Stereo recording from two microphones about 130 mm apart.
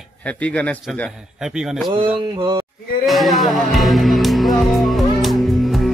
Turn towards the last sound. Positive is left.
turn(degrees=0)  # may be behind; listen again after turning